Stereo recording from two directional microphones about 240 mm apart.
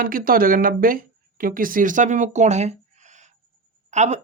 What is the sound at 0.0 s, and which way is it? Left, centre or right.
Speech, right.